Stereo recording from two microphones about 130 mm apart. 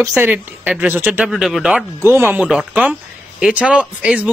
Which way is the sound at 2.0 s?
15° right (ahead or behind).